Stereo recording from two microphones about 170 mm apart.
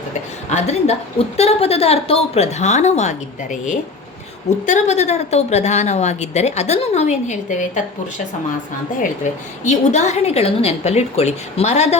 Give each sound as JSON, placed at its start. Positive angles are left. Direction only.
{"t": 0.5, "sound": "a woman's voice", "side_deg": 40}
{"t": 9.6, "sound": "a woman's voice", "side_deg": 45}